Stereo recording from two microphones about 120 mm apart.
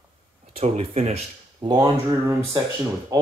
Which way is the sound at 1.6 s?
35° right (ahead or behind).